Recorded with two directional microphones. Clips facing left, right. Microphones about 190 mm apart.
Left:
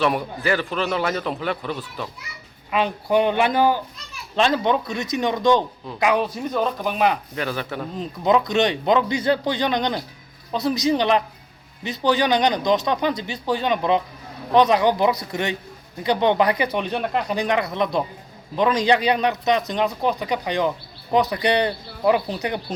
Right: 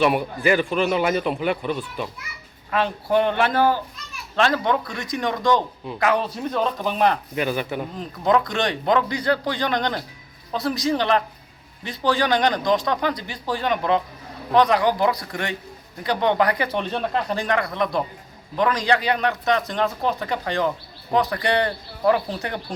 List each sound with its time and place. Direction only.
0.0 s a man's voice: 10° right (ahead or behind)
2.6 s speech: 15° left (ahead or behind)
7.3 s a man's voice: 15° right (ahead or behind)
7.9 s speech: 20° left (ahead or behind)